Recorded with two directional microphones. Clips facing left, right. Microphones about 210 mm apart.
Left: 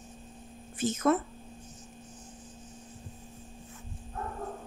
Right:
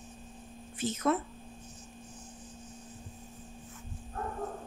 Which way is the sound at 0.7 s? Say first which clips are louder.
Left 3 dB; 45° left (ahead or behind).